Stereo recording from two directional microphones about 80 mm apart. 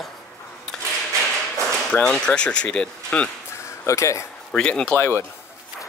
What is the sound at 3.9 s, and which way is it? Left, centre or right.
Speech, left.